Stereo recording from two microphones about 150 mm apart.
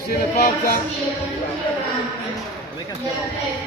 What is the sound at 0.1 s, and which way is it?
Music, 90° left.